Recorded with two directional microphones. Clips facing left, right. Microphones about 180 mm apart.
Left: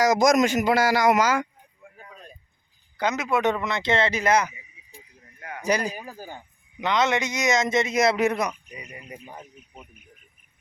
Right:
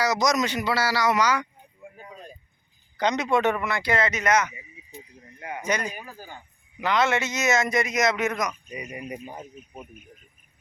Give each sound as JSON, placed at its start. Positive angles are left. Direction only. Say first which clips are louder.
{"t": 0.0, "sound": "a man's voice", "louder": "left 5 dB", "side_deg": 50}
{"t": 3.0, "sound": "speech", "louder": "right 1 dB", "side_deg": 5}
{"t": 3.4, "sound": "a man's voice", "louder": "left 1 dB", "side_deg": 20}
{"t": 5.4, "sound": "a sound", "louder": "right 3 dB", "side_deg": -20}
{"t": 5.6, "sound": "speech", "louder": "left 4 dB", "side_deg": 35}
{"t": 6.3, "sound": "a man's voice", "louder": "left 2 dB", "side_deg": 20}
{"t": 8.7, "sound": "speech", "louder": "right 6 dB", "side_deg": -20}